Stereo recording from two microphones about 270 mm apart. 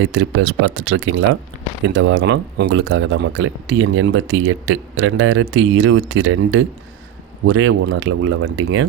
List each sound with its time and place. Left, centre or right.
0.0 s speech: right